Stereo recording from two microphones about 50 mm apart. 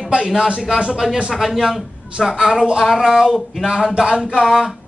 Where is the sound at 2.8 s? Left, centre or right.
Centre.